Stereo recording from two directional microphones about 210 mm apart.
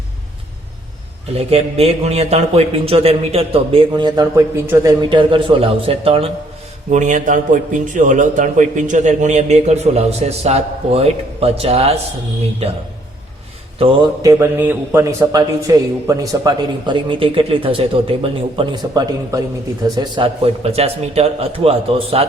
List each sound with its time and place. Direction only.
1.4 s a man's voice: 30° right (ahead or behind)
14.2 s a man's voice: 15° right (ahead or behind)